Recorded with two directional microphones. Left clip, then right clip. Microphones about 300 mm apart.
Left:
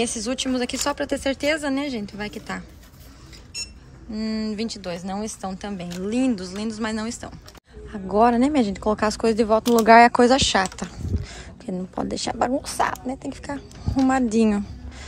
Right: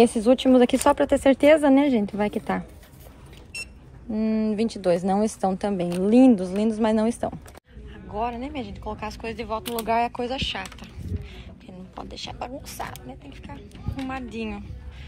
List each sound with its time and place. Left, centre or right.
0.0 s speech: centre
4.1 s speech: centre
8.1 s speech: left
12.0 s speech: left